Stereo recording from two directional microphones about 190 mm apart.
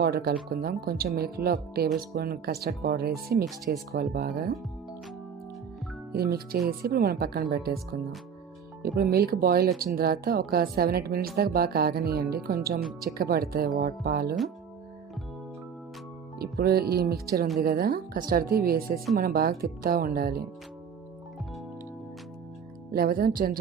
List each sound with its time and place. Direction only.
0.0 s a woman's voice: 55° right (ahead or behind)
6.1 s a woman's voice: 55° right (ahead or behind)
8.8 s a woman's voice: 55° right (ahead or behind)
16.4 s a woman's voice: 55° right (ahead or behind)
22.9 s a woman's voice: 55° right (ahead or behind)